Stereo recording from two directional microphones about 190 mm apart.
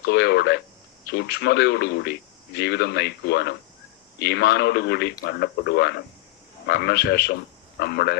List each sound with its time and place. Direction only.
0.0 s a man's voice: 60° left (ahead or behind)